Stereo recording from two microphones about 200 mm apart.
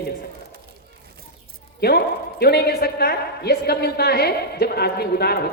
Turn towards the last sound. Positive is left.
turn(degrees=50)  # may be behind; listen again after turning